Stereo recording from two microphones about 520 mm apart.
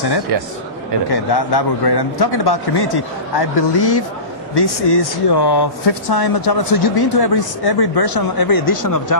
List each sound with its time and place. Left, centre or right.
1.1 s speech: left